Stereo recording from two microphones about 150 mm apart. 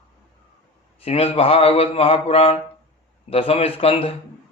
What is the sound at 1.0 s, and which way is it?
Mantra, 40° left (ahead or behind).